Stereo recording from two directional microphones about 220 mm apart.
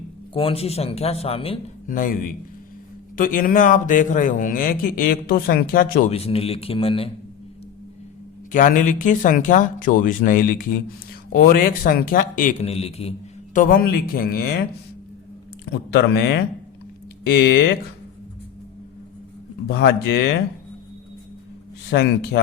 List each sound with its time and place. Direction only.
0.3 s speech: 25° left (ahead or behind)
1.9 s a man's voice: 40° left (ahead or behind)
6.1 s speech: 25° left (ahead or behind)
8.5 s a man's voice: 35° left (ahead or behind)
15.9 s speech: 50° left (ahead or behind)
19.6 s speech: 50° left (ahead or behind)
21.8 s speech: 45° left (ahead or behind)